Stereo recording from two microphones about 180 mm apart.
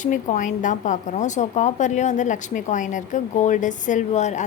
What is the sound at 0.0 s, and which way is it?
A woman's voice, 45° left (ahead or behind).